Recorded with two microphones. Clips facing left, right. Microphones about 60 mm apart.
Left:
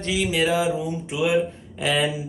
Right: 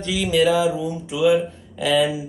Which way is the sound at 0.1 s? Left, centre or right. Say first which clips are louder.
Right 4 dB; centre.